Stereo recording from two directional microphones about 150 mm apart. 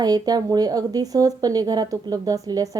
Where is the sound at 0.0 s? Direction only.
25° right (ahead or behind).